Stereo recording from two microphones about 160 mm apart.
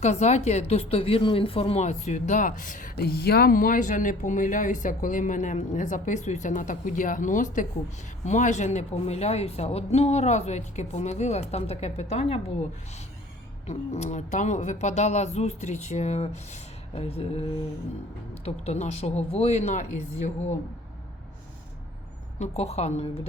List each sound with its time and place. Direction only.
0.0 s speech: 45° left (ahead or behind)
13.7 s speech: 45° left (ahead or behind)
18.4 s speech: 40° left (ahead or behind)
22.4 s a woman's voice: 40° left (ahead or behind)